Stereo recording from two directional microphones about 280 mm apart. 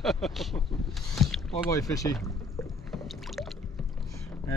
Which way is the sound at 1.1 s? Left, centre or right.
Centre.